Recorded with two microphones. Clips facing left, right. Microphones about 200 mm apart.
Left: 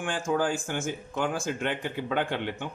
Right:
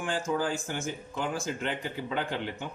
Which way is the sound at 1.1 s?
60° left (ahead or behind).